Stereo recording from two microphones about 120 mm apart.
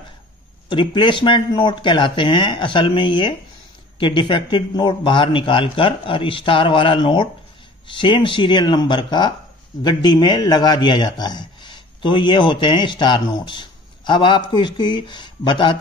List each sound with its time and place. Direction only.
0.7 s speech: 40° left (ahead or behind)